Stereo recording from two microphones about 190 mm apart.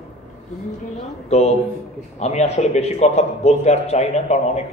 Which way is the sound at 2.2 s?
35° left (ahead or behind).